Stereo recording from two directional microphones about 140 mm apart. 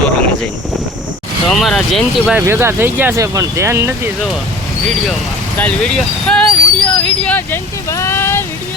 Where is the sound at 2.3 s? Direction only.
15° right (ahead or behind).